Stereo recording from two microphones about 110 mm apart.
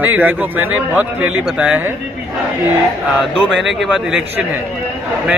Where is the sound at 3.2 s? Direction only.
Centre (ahead or behind).